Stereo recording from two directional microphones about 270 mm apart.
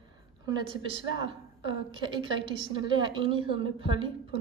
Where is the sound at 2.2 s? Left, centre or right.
Centre.